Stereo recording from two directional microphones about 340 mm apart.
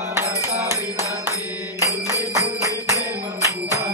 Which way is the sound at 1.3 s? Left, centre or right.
Centre.